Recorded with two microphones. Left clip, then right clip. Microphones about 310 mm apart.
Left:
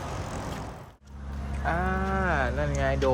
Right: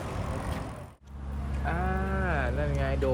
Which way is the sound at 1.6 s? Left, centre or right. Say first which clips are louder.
Left 4 dB; left.